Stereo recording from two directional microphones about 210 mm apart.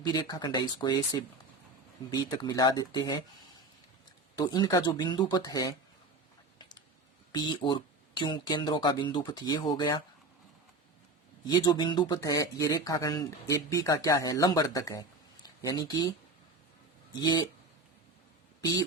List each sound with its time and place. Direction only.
0.0 s speech: 20° left (ahead or behind)
4.4 s speech: 20° left (ahead or behind)
7.3 s speech: 20° left (ahead or behind)
11.4 s speech: 20° left (ahead or behind)